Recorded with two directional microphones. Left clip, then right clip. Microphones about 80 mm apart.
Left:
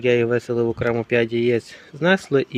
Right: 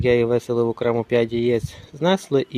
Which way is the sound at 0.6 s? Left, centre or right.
Right.